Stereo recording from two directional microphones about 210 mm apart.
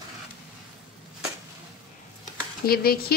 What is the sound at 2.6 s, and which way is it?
Speech, 45° left (ahead or behind).